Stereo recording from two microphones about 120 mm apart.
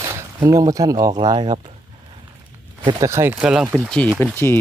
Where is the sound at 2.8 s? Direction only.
40° right (ahead or behind).